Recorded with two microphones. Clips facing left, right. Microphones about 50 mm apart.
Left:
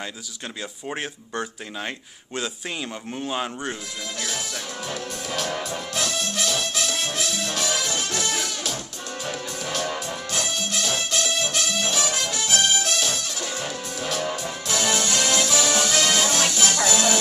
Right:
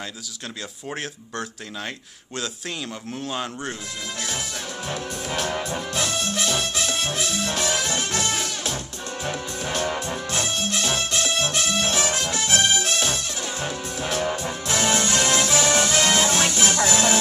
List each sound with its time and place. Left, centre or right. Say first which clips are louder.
0.8 s speech: left 1 dB; centre
4.8 s music: right 3 dB; right